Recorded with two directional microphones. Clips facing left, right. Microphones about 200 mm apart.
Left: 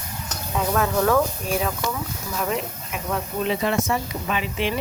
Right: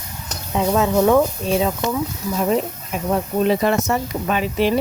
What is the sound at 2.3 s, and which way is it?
Speech, 35° right (ahead or behind).